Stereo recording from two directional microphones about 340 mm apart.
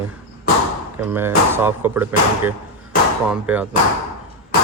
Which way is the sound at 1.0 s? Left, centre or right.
Centre.